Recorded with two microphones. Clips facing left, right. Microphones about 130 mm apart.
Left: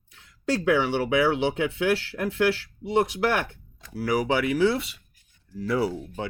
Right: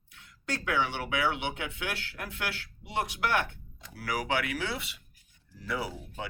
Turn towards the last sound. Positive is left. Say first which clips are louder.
# left 9 dB
turn(degrees=35)  # may be behind; listen again after turning